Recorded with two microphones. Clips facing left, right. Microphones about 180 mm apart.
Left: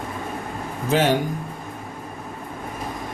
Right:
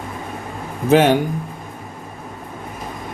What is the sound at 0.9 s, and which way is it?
Speech, 60° right (ahead or behind).